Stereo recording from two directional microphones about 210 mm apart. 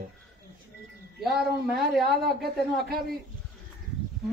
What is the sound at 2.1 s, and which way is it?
Speech, 50° right (ahead or behind).